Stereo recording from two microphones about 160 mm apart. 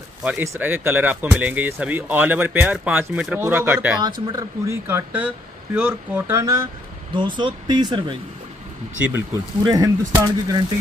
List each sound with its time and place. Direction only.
0.2 s speech: 5° right (ahead or behind)
7.2 s speech: 30° right (ahead or behind)